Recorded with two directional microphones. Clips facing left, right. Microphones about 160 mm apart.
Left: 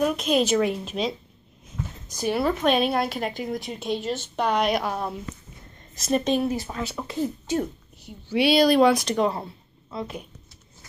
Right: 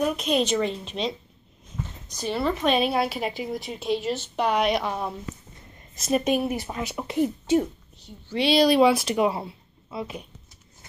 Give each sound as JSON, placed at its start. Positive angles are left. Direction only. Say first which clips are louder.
{"t": 0.0, "sound": "a woman's voice", "louder": "left 2 dB", "side_deg": 0}
{"t": 1.8, "sound": "a sound", "louder": "left 2 dB", "side_deg": 10}
{"t": 2.5, "sound": "a woman's voice", "louder": "left 1 dB", "side_deg": 0}
{"t": 8.0, "sound": "a woman's voice", "louder": "left 3 dB", "side_deg": 5}